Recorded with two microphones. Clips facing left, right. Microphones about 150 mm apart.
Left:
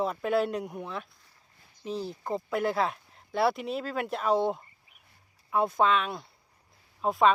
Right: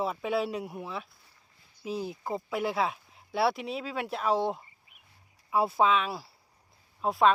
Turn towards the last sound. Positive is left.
turn(degrees=0)  # may be behind; listen again after turning